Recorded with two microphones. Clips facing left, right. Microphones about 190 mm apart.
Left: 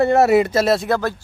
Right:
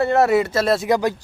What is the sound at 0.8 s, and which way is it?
Speech, 15° right (ahead or behind).